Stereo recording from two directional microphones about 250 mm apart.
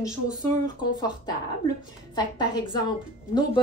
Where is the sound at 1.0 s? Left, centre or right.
Centre.